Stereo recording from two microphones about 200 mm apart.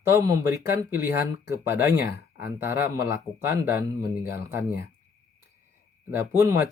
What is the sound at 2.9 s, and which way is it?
Speech, 15° right (ahead or behind).